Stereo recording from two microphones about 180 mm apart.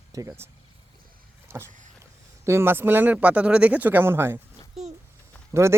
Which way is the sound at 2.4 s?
15° right (ahead or behind).